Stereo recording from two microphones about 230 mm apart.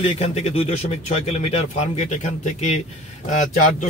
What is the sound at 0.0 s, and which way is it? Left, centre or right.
Speech, left.